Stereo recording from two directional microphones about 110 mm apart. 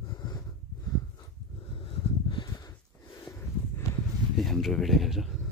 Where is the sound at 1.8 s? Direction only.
50° left (ahead or behind).